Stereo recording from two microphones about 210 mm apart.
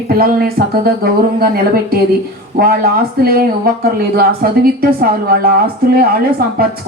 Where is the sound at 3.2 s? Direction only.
45° right (ahead or behind).